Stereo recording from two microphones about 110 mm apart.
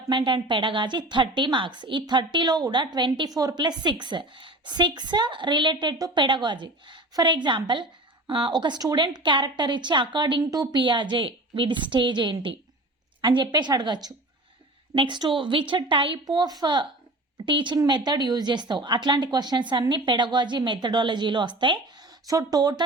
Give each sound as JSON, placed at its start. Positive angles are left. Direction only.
{"t": 0.1, "sound": "a woman's voice", "side_deg": -50}